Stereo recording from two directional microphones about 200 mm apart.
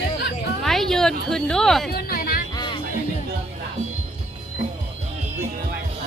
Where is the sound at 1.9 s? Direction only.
50° left (ahead or behind).